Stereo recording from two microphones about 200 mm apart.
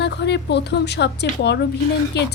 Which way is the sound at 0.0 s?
60° left (ahead or behind).